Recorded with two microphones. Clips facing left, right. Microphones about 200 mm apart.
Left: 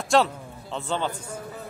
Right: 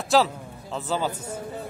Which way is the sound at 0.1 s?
Centre (ahead or behind).